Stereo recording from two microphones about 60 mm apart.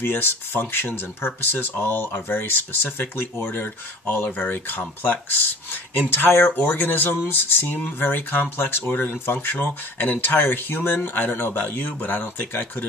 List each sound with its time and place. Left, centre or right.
0.0 s speech: left